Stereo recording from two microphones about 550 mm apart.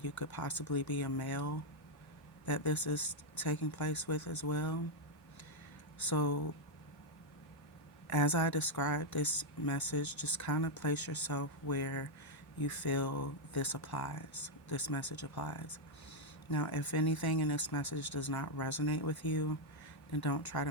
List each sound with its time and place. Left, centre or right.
0.0 s speech: left
6.1 s speech: left
8.1 s speech: left